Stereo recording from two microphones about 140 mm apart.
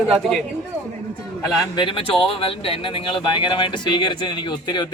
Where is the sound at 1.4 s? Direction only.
35° left (ahead or behind).